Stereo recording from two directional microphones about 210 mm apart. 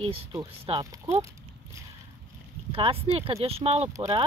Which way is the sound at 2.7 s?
25° right (ahead or behind).